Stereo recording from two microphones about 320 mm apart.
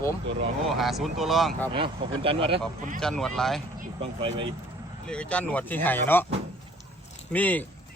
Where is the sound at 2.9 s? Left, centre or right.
Centre.